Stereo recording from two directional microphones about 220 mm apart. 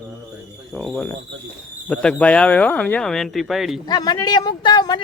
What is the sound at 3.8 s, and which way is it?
Speech, 20° left (ahead or behind).